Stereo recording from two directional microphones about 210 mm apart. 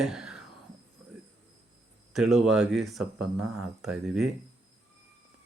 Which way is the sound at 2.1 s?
Centre (ahead or behind).